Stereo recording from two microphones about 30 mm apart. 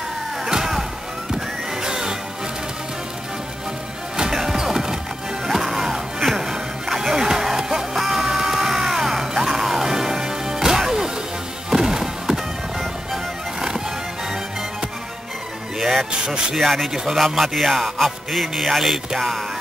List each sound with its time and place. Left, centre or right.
1.8 s music: right
4.2 s music: centre
15.8 s music: centre
16.9 s speech: centre
17.2 s speech: centre
17.9 s music: centre